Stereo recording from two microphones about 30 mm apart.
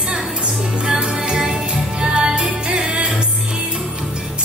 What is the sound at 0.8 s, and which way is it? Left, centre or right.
Music, right.